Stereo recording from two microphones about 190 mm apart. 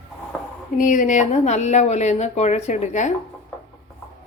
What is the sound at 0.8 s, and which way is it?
Speech, 40° left (ahead or behind).